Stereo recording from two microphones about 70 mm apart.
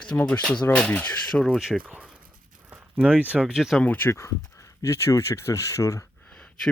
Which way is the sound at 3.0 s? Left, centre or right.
Centre.